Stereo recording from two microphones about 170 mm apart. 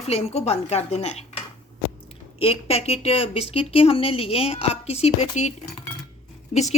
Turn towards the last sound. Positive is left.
turn(degrees=40)  # may be behind; listen again after turning